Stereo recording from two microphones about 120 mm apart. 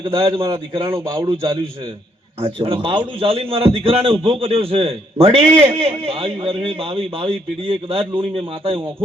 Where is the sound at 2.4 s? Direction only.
55° right (ahead or behind).